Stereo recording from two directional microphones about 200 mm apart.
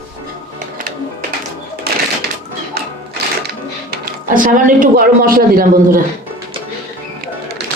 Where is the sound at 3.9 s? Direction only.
40° right (ahead or behind).